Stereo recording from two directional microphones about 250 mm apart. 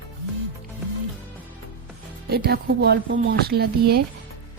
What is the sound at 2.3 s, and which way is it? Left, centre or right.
Speech, right.